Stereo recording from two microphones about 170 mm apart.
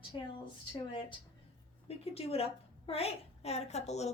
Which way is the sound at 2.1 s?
35° left (ahead or behind).